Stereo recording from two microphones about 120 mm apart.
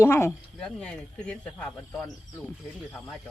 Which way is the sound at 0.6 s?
10° left (ahead or behind).